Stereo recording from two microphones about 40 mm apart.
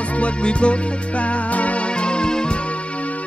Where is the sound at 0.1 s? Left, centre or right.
Left.